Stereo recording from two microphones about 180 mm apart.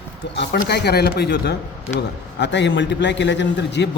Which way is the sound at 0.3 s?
65° left (ahead or behind).